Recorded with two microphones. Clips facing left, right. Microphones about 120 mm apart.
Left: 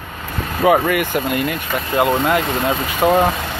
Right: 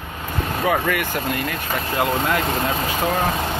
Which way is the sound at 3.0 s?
30° left (ahead or behind).